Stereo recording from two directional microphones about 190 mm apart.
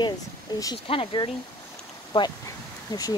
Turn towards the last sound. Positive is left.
turn(degrees=20)  # may be behind; listen again after turning